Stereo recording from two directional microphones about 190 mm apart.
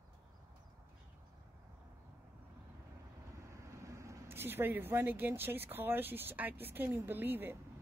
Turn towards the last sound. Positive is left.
turn(degrees=-10)  # may be behind; listen again after turning